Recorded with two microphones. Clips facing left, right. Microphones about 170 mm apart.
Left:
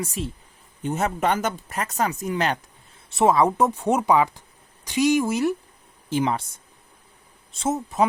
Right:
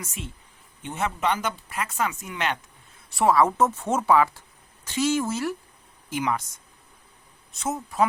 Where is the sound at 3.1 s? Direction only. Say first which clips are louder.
Left 2 dB; 20° left (ahead or behind).